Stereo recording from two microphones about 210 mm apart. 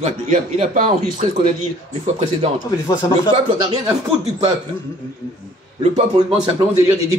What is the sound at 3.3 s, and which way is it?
Speech, 20° right (ahead or behind).